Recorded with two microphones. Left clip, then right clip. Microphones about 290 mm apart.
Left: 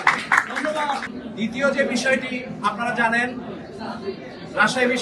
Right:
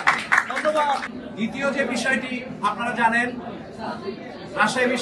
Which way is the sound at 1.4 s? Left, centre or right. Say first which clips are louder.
Left 3 dB; centre.